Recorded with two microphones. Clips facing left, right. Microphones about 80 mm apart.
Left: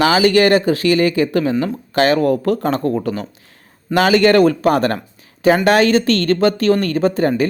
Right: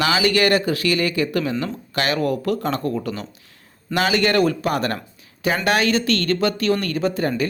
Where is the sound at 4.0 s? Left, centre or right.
Left.